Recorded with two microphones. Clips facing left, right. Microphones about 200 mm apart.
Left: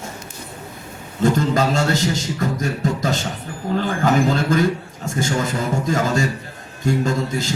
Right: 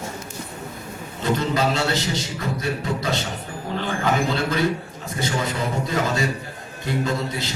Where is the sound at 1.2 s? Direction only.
45° left (ahead or behind).